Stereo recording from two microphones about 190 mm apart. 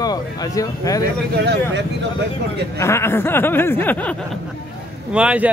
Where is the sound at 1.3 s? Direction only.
60° right (ahead or behind).